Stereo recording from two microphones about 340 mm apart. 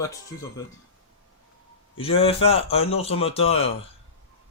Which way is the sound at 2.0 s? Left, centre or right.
Centre.